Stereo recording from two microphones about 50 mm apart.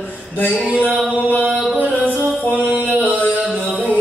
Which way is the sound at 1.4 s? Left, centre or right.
Right.